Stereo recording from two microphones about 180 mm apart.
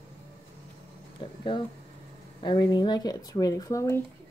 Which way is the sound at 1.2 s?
30° left (ahead or behind).